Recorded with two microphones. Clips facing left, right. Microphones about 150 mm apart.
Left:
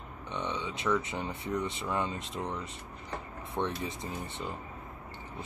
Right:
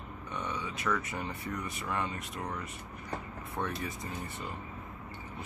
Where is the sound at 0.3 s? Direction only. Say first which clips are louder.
Left 2 dB; 25° left (ahead or behind).